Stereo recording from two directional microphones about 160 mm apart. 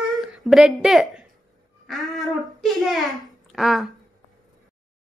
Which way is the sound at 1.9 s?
Centre (ahead or behind).